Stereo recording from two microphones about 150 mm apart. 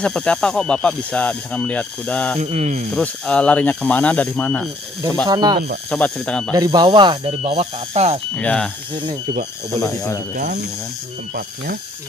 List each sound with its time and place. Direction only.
0.0 s speech: 5° left (ahead or behind)
2.4 s speech: 50° right (ahead or behind)
2.9 s speech: 5° left (ahead or behind)
5.2 s speech: 30° right (ahead or behind)
5.9 s speech: 5° left (ahead or behind)
6.5 s speech: 25° right (ahead or behind); by 8.2 s 45° right (ahead or behind)
8.4 s speech: 10° left (ahead or behind)
9.8 s speech: 20° left (ahead or behind)
10.3 s speech: 60° right (ahead or behind)
11.3 s speech: 85° right